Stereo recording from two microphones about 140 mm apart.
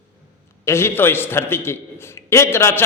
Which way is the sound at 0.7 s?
20° left (ahead or behind).